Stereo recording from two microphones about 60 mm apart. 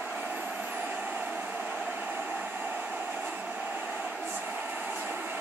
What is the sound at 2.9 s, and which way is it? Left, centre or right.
Train, right.